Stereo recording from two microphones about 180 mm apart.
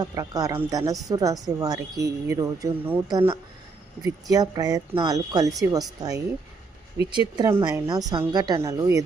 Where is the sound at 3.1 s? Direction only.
25° right (ahead or behind).